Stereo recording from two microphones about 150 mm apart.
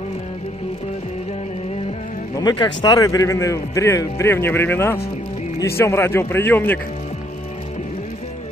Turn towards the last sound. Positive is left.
turn(degrees=15)  # may be behind; listen again after turning